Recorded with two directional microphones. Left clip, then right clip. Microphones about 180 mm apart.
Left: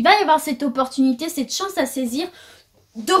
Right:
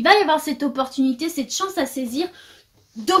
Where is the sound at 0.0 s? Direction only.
40° left (ahead or behind).